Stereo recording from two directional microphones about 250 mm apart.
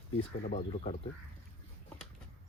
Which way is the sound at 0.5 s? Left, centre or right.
Left.